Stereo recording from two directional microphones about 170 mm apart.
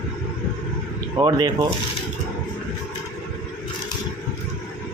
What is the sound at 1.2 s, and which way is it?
Speech, 25° right (ahead or behind).